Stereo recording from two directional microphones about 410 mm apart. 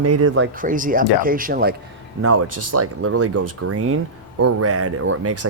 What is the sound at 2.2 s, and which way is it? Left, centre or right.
Speech, right.